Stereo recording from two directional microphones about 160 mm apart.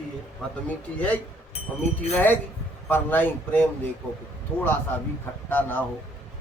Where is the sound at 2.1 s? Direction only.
10° left (ahead or behind).